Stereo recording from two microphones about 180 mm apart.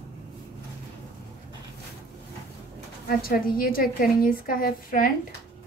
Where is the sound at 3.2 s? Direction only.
55° left (ahead or behind).